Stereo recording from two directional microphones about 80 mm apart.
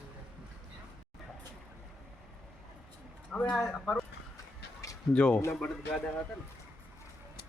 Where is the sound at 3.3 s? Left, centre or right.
Centre.